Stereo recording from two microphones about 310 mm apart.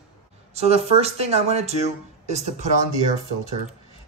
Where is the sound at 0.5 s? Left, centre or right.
Centre.